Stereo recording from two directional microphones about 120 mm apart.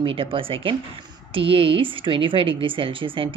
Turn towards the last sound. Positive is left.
turn(degrees=-45)  # may be behind; listen again after turning